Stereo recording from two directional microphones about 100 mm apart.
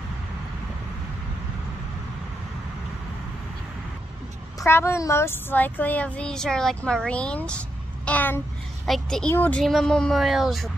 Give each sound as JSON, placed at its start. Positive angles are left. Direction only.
{"t": 4.6, "sound": "speech", "side_deg": 25}
{"t": 8.8, "sound": "a woman's voice", "side_deg": 5}
{"t": 9.3, "sound": "speech", "side_deg": 20}
{"t": 9.6, "sound": "speech", "side_deg": 5}